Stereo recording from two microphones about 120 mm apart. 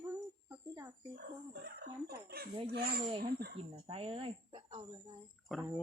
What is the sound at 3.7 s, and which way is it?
Speech, 50° right (ahead or behind).